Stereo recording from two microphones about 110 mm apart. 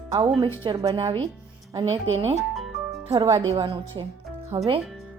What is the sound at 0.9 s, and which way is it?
Speech, 50° right (ahead or behind).